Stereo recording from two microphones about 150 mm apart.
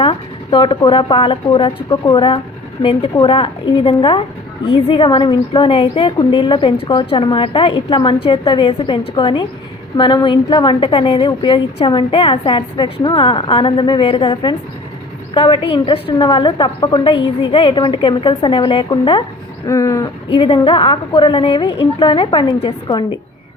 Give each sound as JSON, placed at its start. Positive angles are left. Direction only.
{"t": 0.0, "sound": "a woman's voice", "side_deg": 35}
{"t": 19.6, "sound": "a sound", "side_deg": 20}
{"t": 20.3, "sound": "a woman's voice", "side_deg": 35}